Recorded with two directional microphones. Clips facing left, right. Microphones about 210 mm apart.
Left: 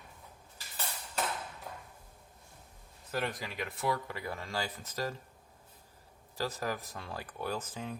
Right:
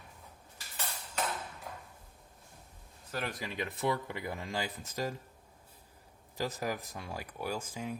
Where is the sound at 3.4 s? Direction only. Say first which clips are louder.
Right 2 dB; 20° right (ahead or behind).